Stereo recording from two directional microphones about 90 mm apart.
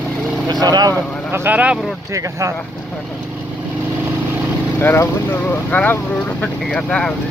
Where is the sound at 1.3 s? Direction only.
25° right (ahead or behind).